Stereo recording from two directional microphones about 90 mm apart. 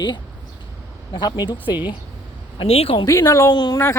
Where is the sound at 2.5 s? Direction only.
90° left.